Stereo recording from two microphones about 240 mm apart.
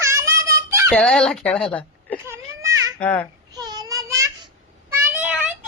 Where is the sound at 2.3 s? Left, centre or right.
Centre.